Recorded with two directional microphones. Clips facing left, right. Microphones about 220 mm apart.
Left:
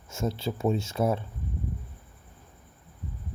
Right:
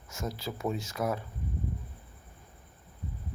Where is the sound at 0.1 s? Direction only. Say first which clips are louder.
Left 6 dB; 25° left (ahead or behind).